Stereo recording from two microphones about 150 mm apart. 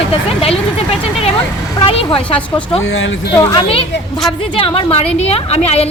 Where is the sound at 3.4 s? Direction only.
25° left (ahead or behind).